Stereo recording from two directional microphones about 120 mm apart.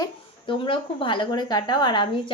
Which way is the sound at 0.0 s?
45° left (ahead or behind).